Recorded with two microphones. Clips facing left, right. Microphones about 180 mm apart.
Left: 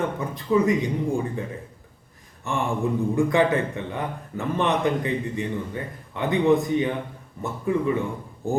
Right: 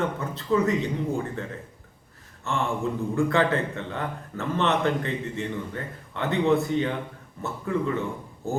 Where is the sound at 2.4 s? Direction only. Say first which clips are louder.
Left 2 dB; 15° left (ahead or behind).